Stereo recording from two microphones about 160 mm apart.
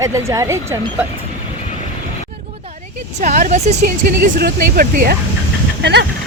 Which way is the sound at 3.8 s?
60° right (ahead or behind).